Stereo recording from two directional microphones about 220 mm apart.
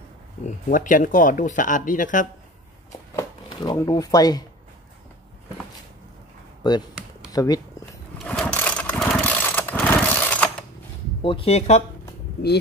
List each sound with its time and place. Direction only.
0.7 s speech: 35° left (ahead or behind)
3.2 s speech: 15° left (ahead or behind)
6.6 s speech: 20° left (ahead or behind)
8.2 s vehicle: 5° left (ahead or behind)
11.2 s speech: 25° left (ahead or behind)